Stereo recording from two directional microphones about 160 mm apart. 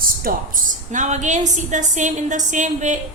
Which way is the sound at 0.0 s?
60° right (ahead or behind).